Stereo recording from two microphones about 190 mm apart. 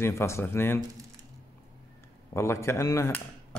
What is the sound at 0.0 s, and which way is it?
Speech, 15° left (ahead or behind).